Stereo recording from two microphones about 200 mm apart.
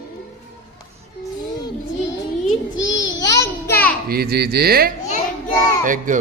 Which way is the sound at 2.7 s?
70° left (ahead or behind).